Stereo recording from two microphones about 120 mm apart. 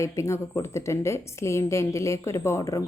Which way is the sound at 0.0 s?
25° left (ahead or behind).